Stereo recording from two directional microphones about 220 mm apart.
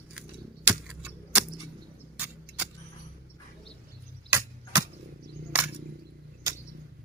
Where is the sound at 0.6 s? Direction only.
5° right (ahead or behind).